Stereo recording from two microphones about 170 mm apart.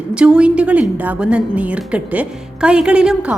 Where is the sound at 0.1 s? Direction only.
5° right (ahead or behind).